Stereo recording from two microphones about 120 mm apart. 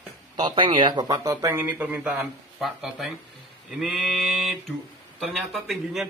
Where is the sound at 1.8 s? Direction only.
15° right (ahead or behind).